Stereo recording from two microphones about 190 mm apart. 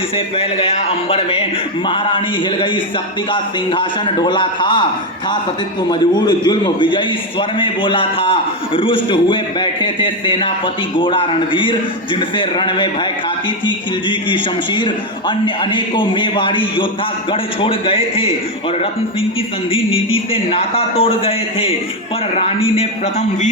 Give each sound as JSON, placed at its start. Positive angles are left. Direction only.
{"t": 1.1, "sound": "a man's voice", "side_deg": 30}
{"t": 5.9, "sound": "a man's voice", "side_deg": 20}
{"t": 19.7, "sound": "a man's voice", "side_deg": 30}